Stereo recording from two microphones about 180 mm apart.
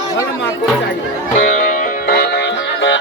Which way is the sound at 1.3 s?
45° left (ahead or behind).